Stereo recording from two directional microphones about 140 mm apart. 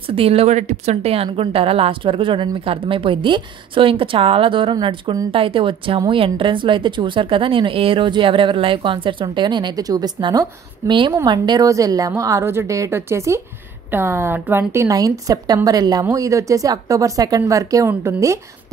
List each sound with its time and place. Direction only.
0.0 s a woman's voice: 40° right (ahead or behind); by 18.4 s 20° right (ahead or behind)